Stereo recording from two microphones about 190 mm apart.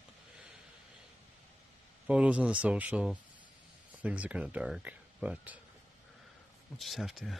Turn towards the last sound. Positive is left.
turn(degrees=0)  # may be behind; listen again after turning